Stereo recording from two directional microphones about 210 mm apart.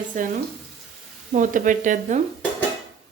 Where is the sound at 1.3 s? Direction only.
40° right (ahead or behind).